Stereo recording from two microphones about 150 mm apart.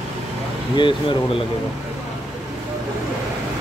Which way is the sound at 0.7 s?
35° left (ahead or behind).